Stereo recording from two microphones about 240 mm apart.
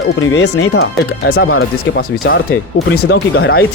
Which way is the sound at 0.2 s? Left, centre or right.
Left.